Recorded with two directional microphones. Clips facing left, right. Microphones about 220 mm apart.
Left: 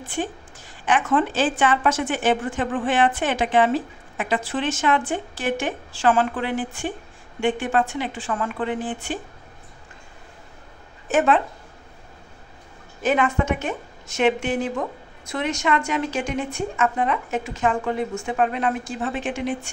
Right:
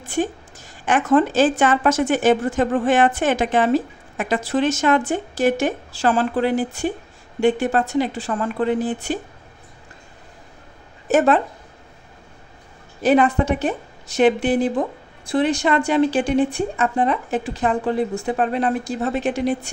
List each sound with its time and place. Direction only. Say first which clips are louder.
0.8 s a woman's voice: right 4 dB; 40° right (ahead or behind)
11.1 s speech: right 3 dB; 40° right (ahead or behind)
13.0 s a woman's voice: right 5 dB; 35° right (ahead or behind)